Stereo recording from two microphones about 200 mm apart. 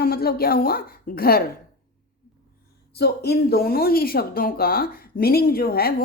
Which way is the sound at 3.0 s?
55° left (ahead or behind).